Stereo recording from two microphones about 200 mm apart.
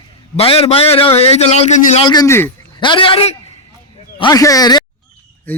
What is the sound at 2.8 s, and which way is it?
A man's voice, 25° left (ahead or behind).